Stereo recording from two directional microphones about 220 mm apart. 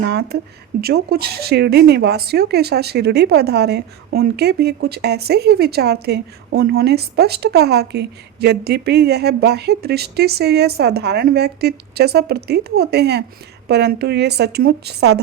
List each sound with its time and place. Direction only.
0.1 s speech: 50° right (ahead or behind)